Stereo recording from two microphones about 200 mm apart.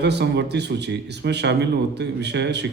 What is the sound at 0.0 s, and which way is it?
A man's voice, 55° right (ahead or behind).